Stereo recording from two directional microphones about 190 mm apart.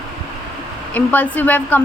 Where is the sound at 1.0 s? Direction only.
10° left (ahead or behind).